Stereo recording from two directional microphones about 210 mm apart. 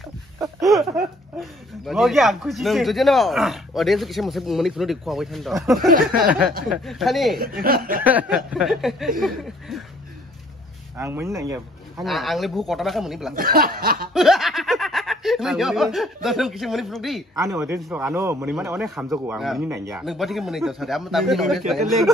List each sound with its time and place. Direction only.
0.4 s a sound: 15° right (ahead or behind)
1.4 s speech: centre (ahead or behind)
5.9 s speech: 45° right (ahead or behind)
6.7 s speech: centre (ahead or behind)
7.3 s speech: 45° right (ahead or behind)
8.0 s speech: 5° right (ahead or behind)
11.0 s speech: 10° right (ahead or behind)
12.0 s speech: centre (ahead or behind)
13.3 s speech: 45° right (ahead or behind)
14.1 s speech: centre (ahead or behind)
17.4 s speech: 15° right (ahead or behind)
19.7 s speech: 15° right (ahead or behind)
20.0 s speech: centre (ahead or behind)